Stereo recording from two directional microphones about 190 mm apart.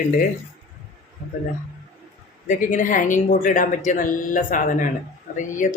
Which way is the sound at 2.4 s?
45° left (ahead or behind).